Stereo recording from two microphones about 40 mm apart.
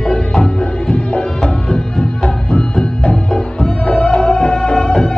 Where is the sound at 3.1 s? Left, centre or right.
Centre.